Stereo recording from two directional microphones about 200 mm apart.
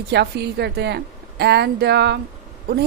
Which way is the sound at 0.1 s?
55° right (ahead or behind).